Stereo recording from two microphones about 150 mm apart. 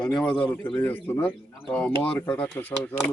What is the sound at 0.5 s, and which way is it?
Speech, 30° left (ahead or behind).